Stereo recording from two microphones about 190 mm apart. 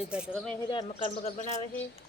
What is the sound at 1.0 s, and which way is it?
Speech, 35° left (ahead or behind).